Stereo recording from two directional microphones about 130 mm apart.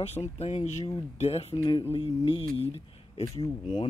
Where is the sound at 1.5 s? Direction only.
35° left (ahead or behind).